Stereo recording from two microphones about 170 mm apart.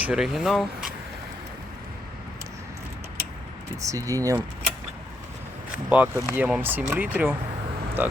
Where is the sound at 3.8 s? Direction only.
20° right (ahead or behind).